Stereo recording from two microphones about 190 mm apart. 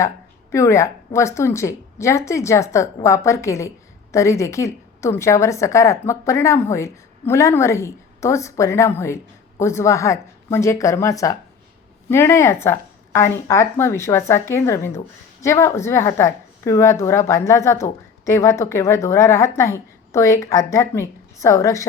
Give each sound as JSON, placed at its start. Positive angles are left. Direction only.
{"t": 0.5, "sound": "speech", "side_deg": 15}